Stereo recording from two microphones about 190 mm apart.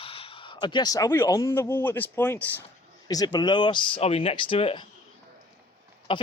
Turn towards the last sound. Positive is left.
turn(degrees=25)  # may be behind; listen again after turning